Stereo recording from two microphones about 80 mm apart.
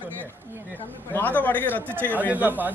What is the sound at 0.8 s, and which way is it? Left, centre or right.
A man's voice, left.